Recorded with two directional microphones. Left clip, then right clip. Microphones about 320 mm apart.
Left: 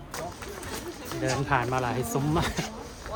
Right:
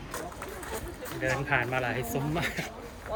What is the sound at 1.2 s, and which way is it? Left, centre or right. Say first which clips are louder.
Speech: left 1 dB; centre.